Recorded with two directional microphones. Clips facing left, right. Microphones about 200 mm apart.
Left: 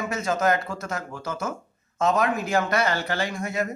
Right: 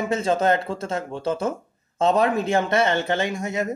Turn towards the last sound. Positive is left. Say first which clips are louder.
# right 2 dB
turn(degrees=-25)  # may be behind; listen again after turning